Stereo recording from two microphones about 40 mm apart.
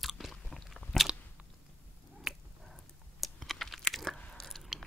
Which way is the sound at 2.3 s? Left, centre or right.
Centre.